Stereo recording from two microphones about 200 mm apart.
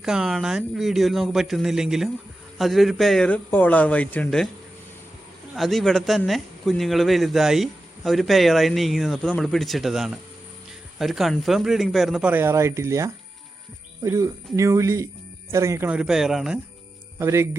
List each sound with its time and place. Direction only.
0.0 s a man's voice: centre (ahead or behind)
5.5 s a man's voice: centre (ahead or behind)
17.2 s speech: 15° right (ahead or behind)